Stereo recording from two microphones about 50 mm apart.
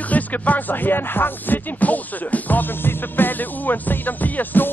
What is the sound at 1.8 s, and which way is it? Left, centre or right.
Music, left.